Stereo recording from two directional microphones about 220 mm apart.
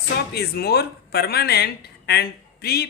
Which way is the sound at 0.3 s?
45° left (ahead or behind).